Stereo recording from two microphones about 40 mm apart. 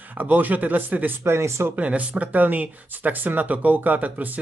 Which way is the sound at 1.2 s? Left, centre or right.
Right.